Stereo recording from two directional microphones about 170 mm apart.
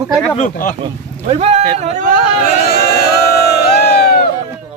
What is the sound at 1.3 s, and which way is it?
Speech, 35° right (ahead or behind).